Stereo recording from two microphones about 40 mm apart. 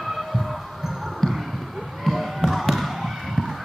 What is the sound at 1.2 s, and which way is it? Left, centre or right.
Basketball bounce, centre.